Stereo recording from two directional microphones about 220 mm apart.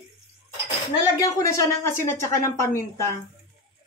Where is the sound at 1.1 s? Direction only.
15° left (ahead or behind).